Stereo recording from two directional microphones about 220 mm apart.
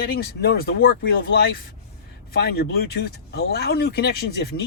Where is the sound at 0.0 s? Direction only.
45° left (ahead or behind).